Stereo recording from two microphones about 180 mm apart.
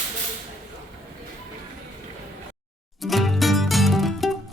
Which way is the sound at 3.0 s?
Centre (ahead or behind).